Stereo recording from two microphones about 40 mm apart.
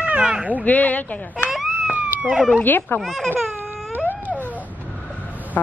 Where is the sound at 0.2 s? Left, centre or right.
Right.